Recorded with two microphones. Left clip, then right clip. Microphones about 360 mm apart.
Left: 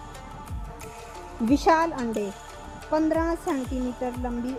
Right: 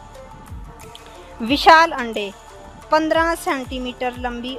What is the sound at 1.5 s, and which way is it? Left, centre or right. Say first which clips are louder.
Speech: right 10 dB; right.